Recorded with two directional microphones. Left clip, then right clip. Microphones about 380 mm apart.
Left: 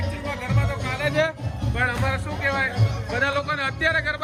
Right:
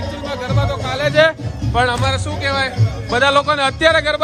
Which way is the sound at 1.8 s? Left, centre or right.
Centre.